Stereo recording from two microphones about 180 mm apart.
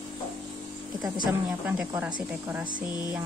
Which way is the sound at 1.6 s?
10° right (ahead or behind).